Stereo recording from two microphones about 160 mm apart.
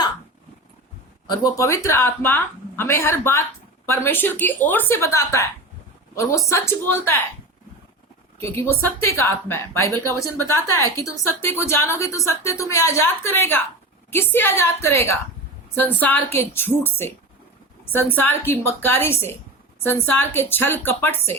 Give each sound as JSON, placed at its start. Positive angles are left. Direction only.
{"t": 1.3, "sound": "a woman's voice", "side_deg": 25}
{"t": 6.5, "sound": "a woman's voice", "side_deg": 15}
{"t": 8.4, "sound": "a woman's voice", "side_deg": 15}